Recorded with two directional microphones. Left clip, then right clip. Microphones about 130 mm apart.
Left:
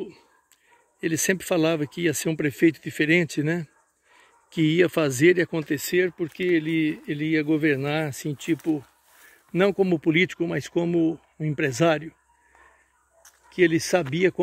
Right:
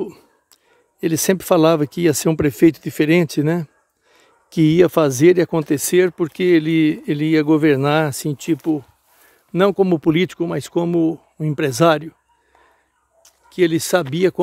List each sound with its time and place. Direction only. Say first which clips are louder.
1.0 s speech: right 7 dB; 45° right (ahead or behind)
9.5 s speech: right 6 dB; 30° right (ahead or behind)
13.5 s speech: right 4 dB; 40° right (ahead or behind)